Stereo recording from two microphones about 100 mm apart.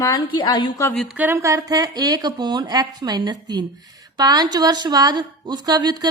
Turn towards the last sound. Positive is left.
turn(degrees=-45)  # may be behind; listen again after turning